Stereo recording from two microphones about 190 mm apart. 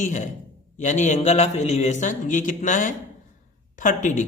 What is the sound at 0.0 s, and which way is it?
Speech, 40° left (ahead or behind).